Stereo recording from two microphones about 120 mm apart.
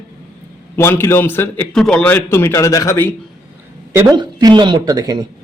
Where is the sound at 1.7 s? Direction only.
5° left (ahead or behind); by 3.1 s 25° left (ahead or behind).